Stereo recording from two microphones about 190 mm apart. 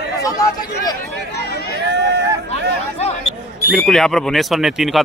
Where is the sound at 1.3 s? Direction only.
55° left (ahead or behind).